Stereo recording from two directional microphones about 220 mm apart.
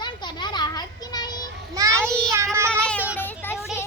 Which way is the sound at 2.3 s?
10° right (ahead or behind).